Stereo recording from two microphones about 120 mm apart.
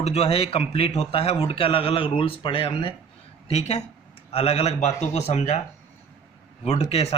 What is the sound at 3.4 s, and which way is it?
Speech, 60° left (ahead or behind).